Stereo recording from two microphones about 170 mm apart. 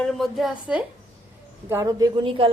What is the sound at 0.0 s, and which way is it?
Speech, centre (ahead or behind).